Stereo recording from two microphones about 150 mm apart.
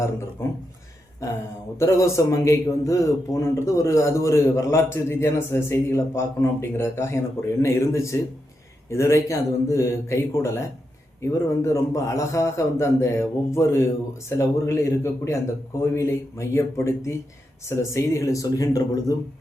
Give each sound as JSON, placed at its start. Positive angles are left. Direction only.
{"t": 0.4, "sound": "speech", "side_deg": 15}
{"t": 1.8, "sound": "a man's voice", "side_deg": 20}